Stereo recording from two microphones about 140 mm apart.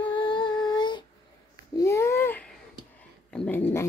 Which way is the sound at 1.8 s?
20° left (ahead or behind).